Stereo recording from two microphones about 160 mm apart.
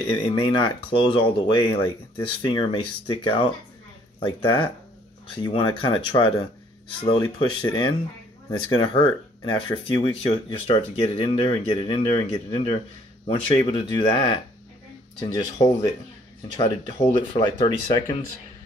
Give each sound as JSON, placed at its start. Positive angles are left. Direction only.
{"t": 0.3, "sound": "speech", "side_deg": 30}
{"t": 17.0, "sound": "speech", "side_deg": 30}